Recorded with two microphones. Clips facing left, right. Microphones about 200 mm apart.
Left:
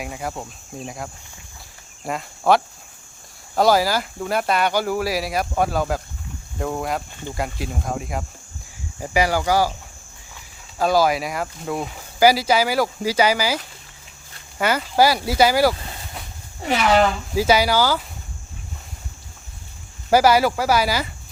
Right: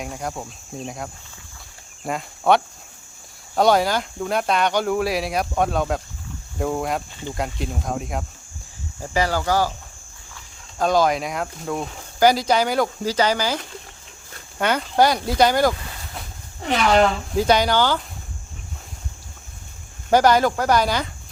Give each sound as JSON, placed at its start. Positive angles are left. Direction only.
{"t": 0.0, "sound": "speech", "side_deg": 5}
{"t": 9.0, "sound": "speech", "side_deg": 10}
{"t": 10.8, "sound": "speech", "side_deg": 5}
{"t": 14.6, "sound": "speech", "side_deg": 5}
{"t": 20.1, "sound": "speech", "side_deg": 5}